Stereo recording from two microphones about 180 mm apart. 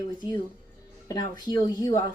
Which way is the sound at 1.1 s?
25° left (ahead or behind).